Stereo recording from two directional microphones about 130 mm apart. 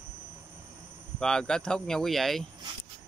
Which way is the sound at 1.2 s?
5° left (ahead or behind).